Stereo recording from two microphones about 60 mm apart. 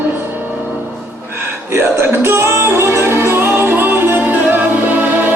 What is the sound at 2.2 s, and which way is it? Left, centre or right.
Music, right.